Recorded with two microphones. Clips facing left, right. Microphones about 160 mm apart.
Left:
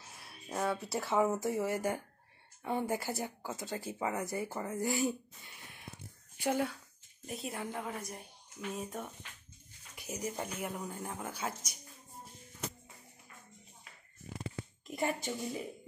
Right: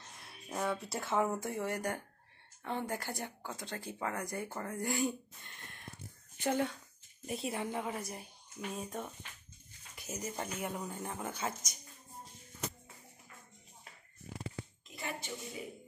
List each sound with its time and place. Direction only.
0.0 s speech: 5° left (ahead or behind)
9.9 s speech: 15° left (ahead or behind)
10.3 s speech: centre (ahead or behind)
14.9 s a woman's voice: 50° left (ahead or behind)